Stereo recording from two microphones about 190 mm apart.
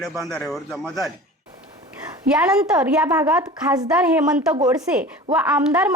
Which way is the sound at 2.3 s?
5° right (ahead or behind).